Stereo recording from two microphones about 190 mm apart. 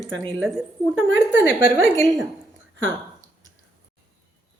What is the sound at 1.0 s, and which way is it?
Speech, 75° right (ahead or behind).